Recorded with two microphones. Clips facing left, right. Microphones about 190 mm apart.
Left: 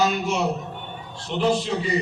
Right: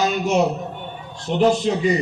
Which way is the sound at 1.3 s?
45° right (ahead or behind).